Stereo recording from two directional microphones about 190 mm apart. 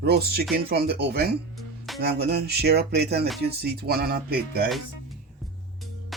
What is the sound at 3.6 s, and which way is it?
Speech, 55° right (ahead or behind).